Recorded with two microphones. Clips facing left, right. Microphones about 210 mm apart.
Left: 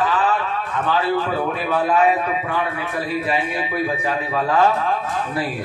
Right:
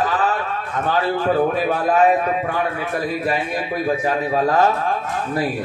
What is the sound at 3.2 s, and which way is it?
A man's voice, 40° right (ahead or behind).